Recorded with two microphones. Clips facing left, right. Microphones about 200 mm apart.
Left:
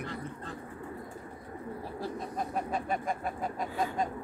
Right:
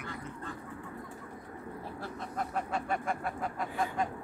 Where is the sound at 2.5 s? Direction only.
20° left (ahead or behind).